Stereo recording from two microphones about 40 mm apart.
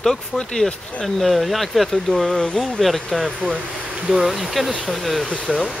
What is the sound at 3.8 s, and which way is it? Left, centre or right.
Speech, right.